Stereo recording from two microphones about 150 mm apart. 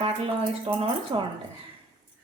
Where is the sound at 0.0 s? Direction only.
35° right (ahead or behind).